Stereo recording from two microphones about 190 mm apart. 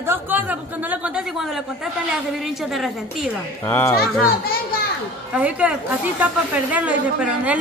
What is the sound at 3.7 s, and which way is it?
Speech, 10° left (ahead or behind).